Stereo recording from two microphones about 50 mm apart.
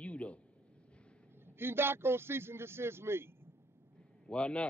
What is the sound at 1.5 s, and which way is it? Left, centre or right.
A man's voice, right.